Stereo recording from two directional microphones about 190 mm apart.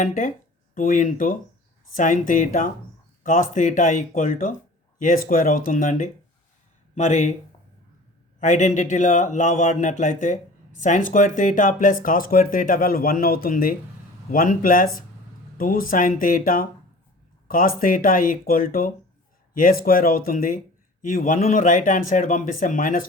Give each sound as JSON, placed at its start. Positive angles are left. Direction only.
{"t": 0.0, "sound": "a man's voice", "side_deg": 45}
{"t": 8.4, "sound": "a man's voice", "side_deg": 40}